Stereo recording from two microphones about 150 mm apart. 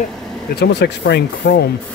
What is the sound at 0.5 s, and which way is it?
Speech, 90° left.